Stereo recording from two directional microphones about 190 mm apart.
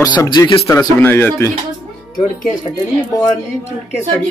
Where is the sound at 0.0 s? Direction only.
20° left (ahead or behind).